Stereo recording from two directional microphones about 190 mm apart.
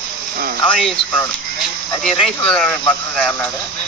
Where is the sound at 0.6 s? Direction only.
5° left (ahead or behind).